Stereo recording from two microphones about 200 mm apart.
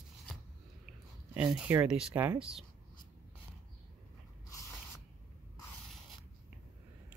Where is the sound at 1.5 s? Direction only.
10° right (ahead or behind).